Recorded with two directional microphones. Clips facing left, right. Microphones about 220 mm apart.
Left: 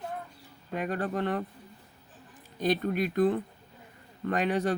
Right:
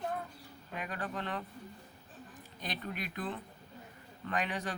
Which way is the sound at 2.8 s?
45° left (ahead or behind).